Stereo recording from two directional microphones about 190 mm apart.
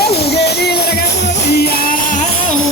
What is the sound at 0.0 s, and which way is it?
Music, 60° left (ahead or behind).